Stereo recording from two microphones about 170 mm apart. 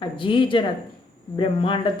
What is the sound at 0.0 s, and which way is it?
Speech, 30° left (ahead or behind).